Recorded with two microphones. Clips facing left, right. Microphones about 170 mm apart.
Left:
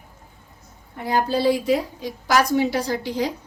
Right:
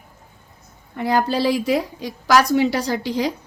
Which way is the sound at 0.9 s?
90° right.